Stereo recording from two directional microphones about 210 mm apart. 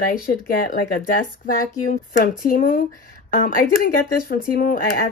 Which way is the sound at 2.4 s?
40° left (ahead or behind).